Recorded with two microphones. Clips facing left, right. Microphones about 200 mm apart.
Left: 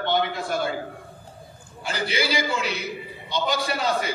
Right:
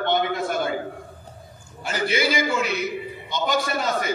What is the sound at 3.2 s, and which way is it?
Speech, 50° right (ahead or behind).